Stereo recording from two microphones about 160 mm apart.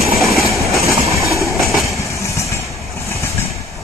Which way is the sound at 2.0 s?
20° left (ahead or behind).